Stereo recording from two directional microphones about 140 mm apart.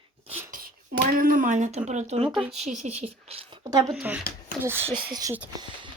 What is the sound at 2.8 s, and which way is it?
Speech, 50° right (ahead or behind).